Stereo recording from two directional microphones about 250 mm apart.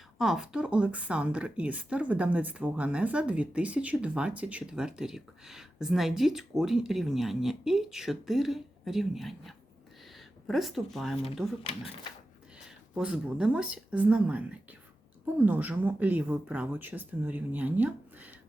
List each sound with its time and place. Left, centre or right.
0.2 s a woman's voice: centre
11.6 s speech: left
12.6 s a woman's voice: centre